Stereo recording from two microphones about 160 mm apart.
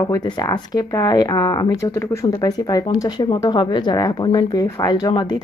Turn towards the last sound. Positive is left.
turn(degrees=25)  # may be behind; listen again after turning